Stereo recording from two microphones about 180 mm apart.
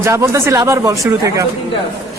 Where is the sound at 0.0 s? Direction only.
15° right (ahead or behind).